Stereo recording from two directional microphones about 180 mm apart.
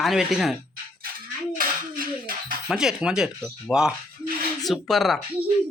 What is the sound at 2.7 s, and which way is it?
Speech, 5° right (ahead or behind).